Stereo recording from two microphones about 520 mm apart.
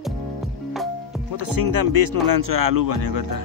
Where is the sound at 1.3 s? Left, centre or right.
Right.